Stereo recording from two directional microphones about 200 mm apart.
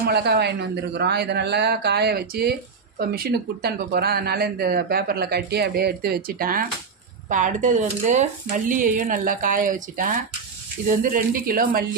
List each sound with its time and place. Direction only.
0.0 s a man's voice: 55° right (ahead or behind)